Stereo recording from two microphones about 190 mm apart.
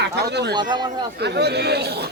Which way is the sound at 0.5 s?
25° right (ahead or behind).